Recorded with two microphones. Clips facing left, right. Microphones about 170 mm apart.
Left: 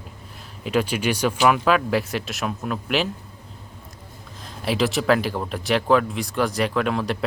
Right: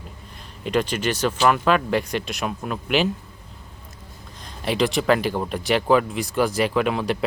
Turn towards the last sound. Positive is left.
turn(degrees=0)  # may be behind; listen again after turning